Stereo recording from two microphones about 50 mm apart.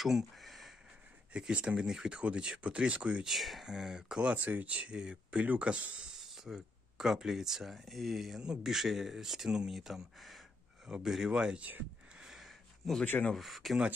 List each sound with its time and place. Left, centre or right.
0.0 s speech: centre
1.5 s speech: right
3.3 s speech: centre
4.3 s speech: right
6.2 s speech: centre
8.4 s speech: centre
12.2 s a sound: centre
13.4 s speech: centre